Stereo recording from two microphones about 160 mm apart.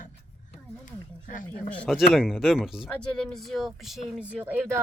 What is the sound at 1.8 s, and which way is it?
Speech, centre (ahead or behind).